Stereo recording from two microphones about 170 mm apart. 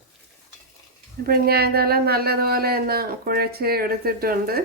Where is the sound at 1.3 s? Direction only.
65° right (ahead or behind).